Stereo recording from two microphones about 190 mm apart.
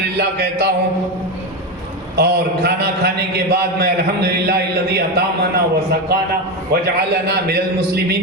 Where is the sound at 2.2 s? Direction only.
60° right (ahead or behind).